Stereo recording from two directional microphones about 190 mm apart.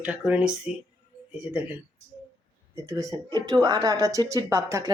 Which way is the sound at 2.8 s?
15° right (ahead or behind).